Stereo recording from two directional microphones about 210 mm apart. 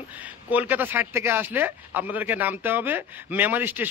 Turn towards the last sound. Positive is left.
turn(degrees=-10)  # may be behind; listen again after turning